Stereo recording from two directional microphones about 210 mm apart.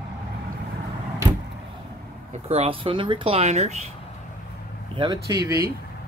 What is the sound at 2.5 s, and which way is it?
Speech, 25° right (ahead or behind).